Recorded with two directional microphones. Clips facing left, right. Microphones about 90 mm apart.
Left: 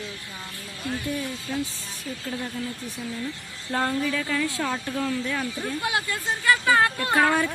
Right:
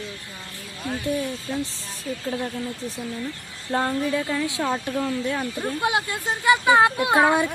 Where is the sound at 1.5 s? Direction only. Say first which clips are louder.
Even; 30° right (ahead or behind).